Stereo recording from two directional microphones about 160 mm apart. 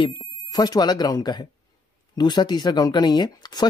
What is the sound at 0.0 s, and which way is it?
Speech, 30° left (ahead or behind).